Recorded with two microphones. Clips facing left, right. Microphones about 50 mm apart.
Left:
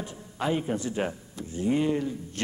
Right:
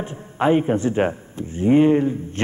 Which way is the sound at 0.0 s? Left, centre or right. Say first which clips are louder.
Right 10 dB; right.